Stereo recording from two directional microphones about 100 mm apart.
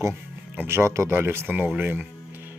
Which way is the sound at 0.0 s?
25° right (ahead or behind).